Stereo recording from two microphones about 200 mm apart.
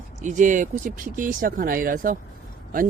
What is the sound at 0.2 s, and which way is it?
Speech, 40° right (ahead or behind).